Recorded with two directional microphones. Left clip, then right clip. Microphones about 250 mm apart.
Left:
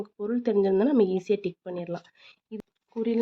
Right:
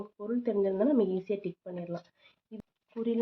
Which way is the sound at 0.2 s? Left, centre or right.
Left.